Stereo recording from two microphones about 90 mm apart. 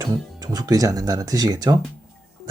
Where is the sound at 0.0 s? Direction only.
50° right (ahead or behind).